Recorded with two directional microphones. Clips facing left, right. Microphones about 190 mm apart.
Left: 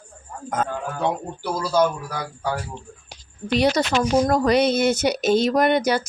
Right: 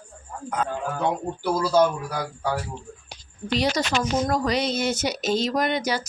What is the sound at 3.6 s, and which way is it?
Speech, 60° left (ahead or behind).